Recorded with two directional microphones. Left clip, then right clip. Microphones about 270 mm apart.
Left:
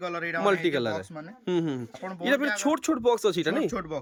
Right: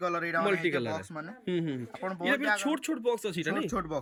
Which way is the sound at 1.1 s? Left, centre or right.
Centre.